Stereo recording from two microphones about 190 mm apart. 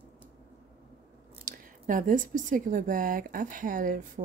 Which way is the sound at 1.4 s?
45° right (ahead or behind).